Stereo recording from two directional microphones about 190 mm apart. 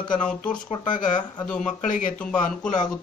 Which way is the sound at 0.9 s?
45° left (ahead or behind).